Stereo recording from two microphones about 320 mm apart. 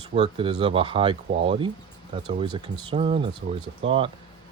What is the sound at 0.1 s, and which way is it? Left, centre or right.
Speech, centre.